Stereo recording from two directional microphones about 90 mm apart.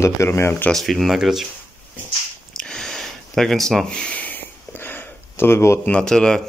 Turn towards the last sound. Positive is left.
turn(degrees=5)  # may be behind; listen again after turning